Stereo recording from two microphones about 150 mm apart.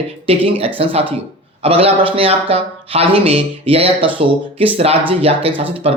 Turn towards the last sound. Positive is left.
turn(degrees=-40)  # may be behind; listen again after turning